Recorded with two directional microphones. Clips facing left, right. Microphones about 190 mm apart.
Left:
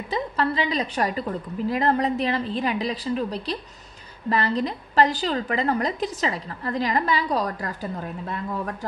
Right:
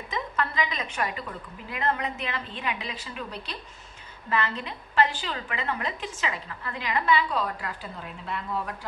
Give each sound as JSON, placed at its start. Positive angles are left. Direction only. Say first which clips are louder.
{"t": 0.1, "sound": "a woman's voice", "louder": "left 6 dB", "side_deg": 35}